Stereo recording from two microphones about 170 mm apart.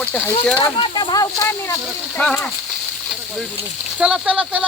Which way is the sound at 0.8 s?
30° left (ahead or behind).